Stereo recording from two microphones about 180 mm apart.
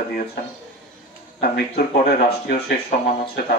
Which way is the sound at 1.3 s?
60° left (ahead or behind).